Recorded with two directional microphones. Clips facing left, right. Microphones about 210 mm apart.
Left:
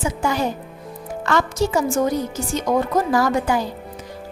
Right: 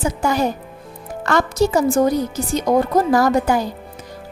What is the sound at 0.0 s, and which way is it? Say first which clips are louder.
A woman's voice: right 3 dB; 40° right (ahead or behind).